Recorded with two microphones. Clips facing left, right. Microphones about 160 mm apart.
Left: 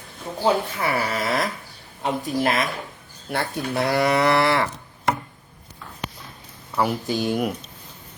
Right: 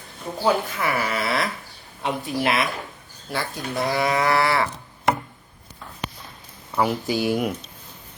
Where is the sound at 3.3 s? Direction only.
60° left (ahead or behind).